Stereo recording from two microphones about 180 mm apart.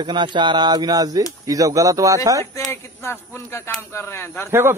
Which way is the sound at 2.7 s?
15° left (ahead or behind).